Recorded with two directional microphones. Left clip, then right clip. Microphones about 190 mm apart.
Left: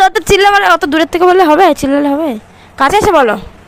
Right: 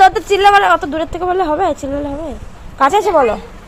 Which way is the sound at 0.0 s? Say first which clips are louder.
Left 1 dB; 55° left (ahead or behind).